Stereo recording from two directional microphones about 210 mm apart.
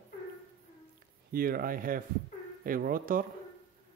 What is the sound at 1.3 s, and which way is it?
A man's voice, 45° right (ahead or behind).